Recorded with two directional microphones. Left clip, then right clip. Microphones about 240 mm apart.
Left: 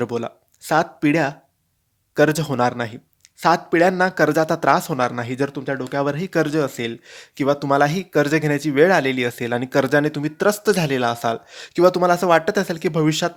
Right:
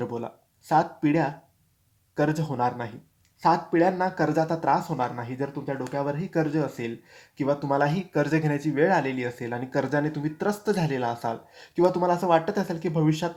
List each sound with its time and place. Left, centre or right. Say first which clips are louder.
0.0 s speech: left 8 dB; left